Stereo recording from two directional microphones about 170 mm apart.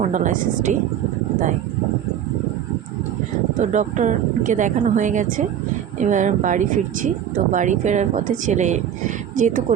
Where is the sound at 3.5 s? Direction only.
45° right (ahead or behind).